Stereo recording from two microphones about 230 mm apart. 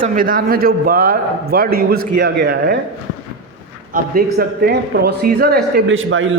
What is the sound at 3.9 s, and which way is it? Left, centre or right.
Speech, right.